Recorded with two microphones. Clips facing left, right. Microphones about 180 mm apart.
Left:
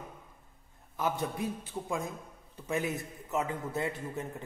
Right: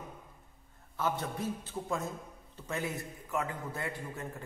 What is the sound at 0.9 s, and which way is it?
A man's voice, 15° left (ahead or behind).